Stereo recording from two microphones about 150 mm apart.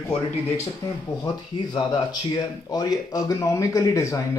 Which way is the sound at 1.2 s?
30° left (ahead or behind).